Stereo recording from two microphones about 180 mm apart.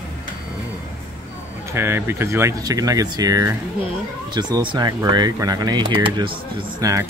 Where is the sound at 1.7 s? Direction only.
15° right (ahead or behind).